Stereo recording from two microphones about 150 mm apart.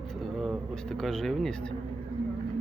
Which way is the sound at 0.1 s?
Centre (ahead or behind).